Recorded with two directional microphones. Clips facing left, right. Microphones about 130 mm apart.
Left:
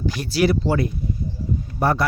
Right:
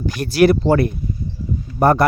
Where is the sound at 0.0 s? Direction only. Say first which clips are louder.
Right 6 dB; 55° right (ahead or behind).